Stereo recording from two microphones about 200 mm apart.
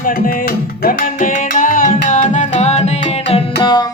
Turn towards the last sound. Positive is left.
turn(degrees=20)  # may be behind; listen again after turning